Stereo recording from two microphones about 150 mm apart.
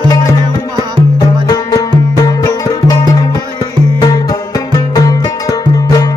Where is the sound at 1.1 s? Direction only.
25° left (ahead or behind).